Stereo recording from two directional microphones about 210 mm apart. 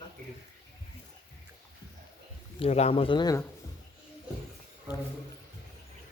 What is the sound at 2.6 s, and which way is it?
Speech, 30° left (ahead or behind).